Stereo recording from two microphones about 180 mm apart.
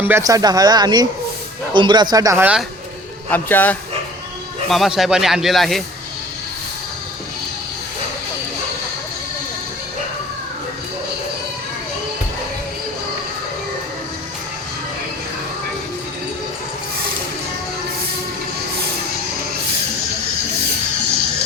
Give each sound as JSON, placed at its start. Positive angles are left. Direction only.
{"t": 0.0, "sound": "speech", "side_deg": -15}
{"t": 3.2, "sound": "a man's voice", "side_deg": 10}
{"t": 4.7, "sound": "speech", "side_deg": 0}